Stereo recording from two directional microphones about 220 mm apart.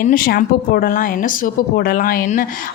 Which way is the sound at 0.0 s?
40° left (ahead or behind).